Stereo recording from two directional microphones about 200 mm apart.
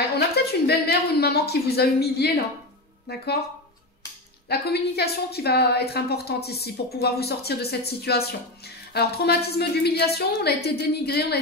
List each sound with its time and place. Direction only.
0.5 s a woman's voice: 55° left (ahead or behind)
4.5 s a woman's voice: 55° left (ahead or behind)